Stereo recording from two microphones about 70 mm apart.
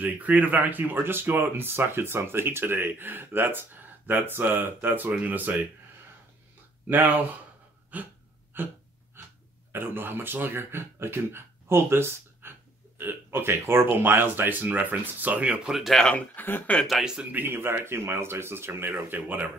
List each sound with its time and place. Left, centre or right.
0.0 s speech: right
6.9 s speech: right
8.5 s a sound: right
9.7 s speech: right
15.7 s speech: centre
16.3 s speech: left
16.8 s speech: centre
17.2 s speech: right